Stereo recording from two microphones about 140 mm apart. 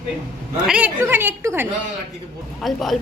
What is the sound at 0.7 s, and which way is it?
Speech, 15° right (ahead or behind).